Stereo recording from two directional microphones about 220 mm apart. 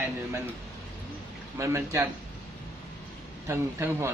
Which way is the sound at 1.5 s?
15° right (ahead or behind).